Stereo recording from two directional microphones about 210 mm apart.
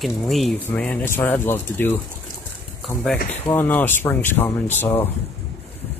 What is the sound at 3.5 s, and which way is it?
Speech, 10° left (ahead or behind).